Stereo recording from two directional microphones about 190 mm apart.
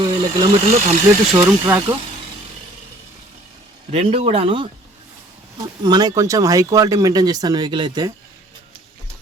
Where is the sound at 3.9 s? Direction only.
30° right (ahead or behind).